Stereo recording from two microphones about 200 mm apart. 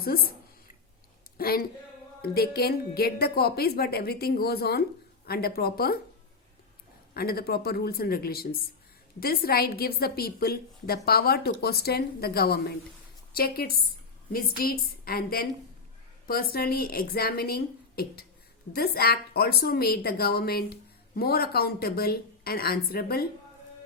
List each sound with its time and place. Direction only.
0.0 s a woman's voice: 50° left (ahead or behind)
1.4 s a woman's voice: 50° left (ahead or behind)
7.1 s a woman's voice: 50° left (ahead or behind)